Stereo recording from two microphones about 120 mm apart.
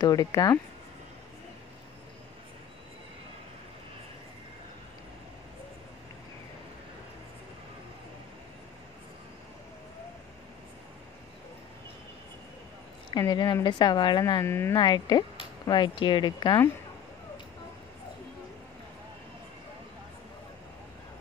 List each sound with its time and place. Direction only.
0.0 s speech: 30° left (ahead or behind)
13.1 s speech: 40° left (ahead or behind)
14.4 s speech: 20° left (ahead or behind)
14.8 s speech: 35° left (ahead or behind)